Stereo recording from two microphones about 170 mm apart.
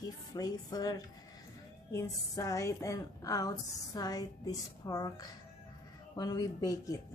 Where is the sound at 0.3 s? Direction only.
20° left (ahead or behind).